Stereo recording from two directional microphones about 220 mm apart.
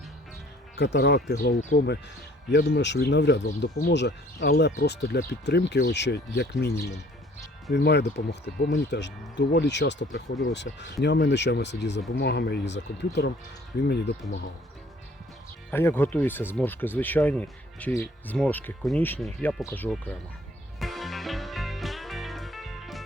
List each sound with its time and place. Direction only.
0.9 s speech: 50° left (ahead or behind)
2.5 s speech: 50° left (ahead or behind)
15.7 s speech: 10° left (ahead or behind)
20.7 s music: centre (ahead or behind)